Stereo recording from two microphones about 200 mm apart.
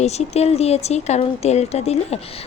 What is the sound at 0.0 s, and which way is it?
A woman's voice, 30° left (ahead or behind).